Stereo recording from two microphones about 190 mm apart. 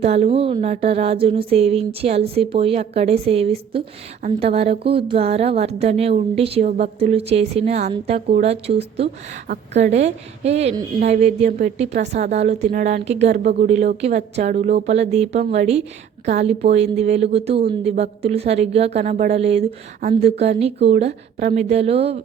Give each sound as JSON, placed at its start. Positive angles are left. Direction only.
{"t": 0.0, "sound": "speech", "side_deg": -35}
{"t": 16.6, "sound": "speech", "side_deg": -35}